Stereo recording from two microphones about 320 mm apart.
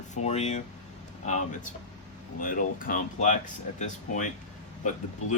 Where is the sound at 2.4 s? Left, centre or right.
Left.